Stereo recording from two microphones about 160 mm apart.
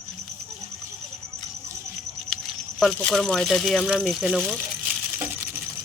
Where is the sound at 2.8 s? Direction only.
Centre (ahead or behind).